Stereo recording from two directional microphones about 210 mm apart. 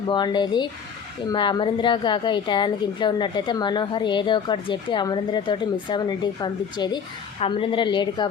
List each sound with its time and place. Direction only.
0.1 s a woman's voice: 20° left (ahead or behind)